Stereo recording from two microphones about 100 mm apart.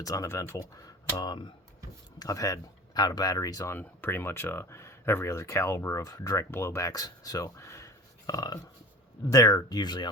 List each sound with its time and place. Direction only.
0.0 s speech: 35° left (ahead or behind)
2.1 s speech: 35° left (ahead or behind)
3.8 s speech: 20° left (ahead or behind); by 10.1 s 45° left (ahead or behind)